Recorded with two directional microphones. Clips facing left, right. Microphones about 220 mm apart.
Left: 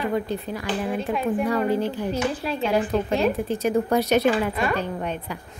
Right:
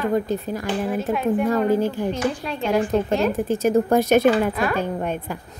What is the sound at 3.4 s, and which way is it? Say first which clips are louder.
Speech: right 4 dB; 45° right (ahead or behind).